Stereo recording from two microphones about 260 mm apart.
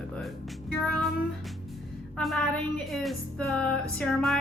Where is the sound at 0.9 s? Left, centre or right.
Centre.